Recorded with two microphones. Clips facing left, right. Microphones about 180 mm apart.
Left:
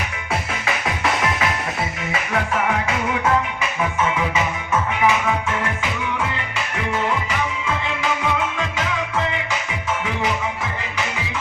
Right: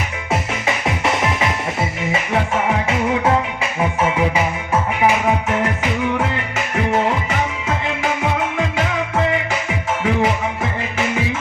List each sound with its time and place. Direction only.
0.9 s music: 25° right (ahead or behind)
3.2 s music: 30° right (ahead or behind)